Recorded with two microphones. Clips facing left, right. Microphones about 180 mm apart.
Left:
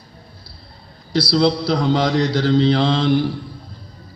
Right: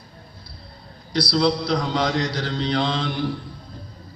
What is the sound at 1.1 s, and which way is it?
Mantra, 30° left (ahead or behind).